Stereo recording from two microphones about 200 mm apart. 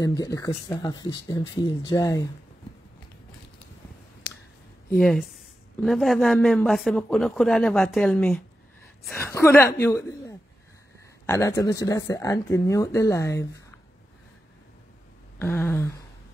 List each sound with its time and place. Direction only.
0.0 s speech: 20° left (ahead or behind)
4.9 s speech: centre (ahead or behind)
15.3 s speech: 10° left (ahead or behind)